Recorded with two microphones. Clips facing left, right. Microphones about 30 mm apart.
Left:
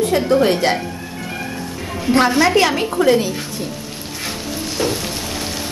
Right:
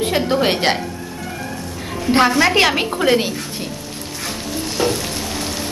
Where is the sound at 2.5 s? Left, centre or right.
Right.